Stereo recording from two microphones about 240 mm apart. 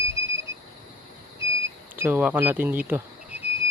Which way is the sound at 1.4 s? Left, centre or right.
Centre.